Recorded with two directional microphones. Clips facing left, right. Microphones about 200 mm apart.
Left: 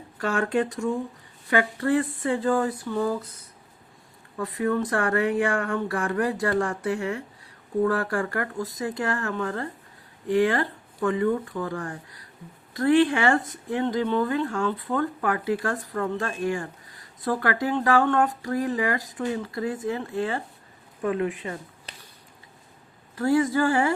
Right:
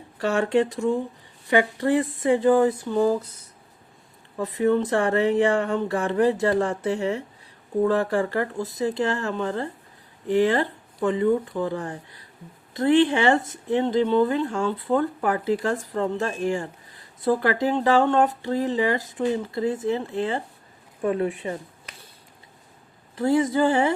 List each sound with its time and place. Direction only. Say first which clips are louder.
0.2 s speech: right 3 dB; 25° right (ahead or behind)
4.4 s speech: right 4 dB; 25° right (ahead or behind)
21.9 s a sound: left 1 dB; 30° left (ahead or behind)
23.1 s speech: right 1 dB; 20° right (ahead or behind)